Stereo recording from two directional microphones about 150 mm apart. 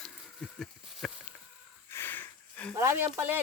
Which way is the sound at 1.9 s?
15° left (ahead or behind).